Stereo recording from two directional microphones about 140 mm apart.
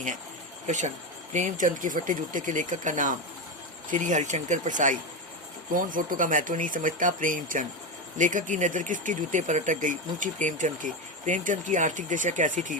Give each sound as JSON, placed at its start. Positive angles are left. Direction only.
{"t": 1.3, "sound": "speech", "side_deg": -60}
{"t": 5.7, "sound": "speech", "side_deg": -75}